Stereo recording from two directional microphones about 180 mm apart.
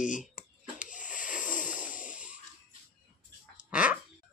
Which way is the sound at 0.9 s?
45° left (ahead or behind).